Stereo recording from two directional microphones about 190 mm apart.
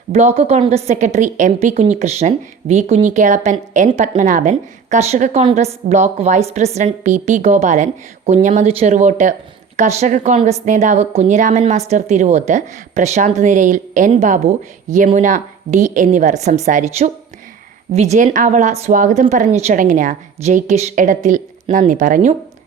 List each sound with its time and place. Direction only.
0.1 s a woman's voice: 35° right (ahead or behind)